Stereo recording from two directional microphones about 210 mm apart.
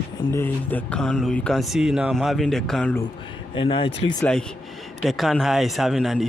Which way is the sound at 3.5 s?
25° left (ahead or behind).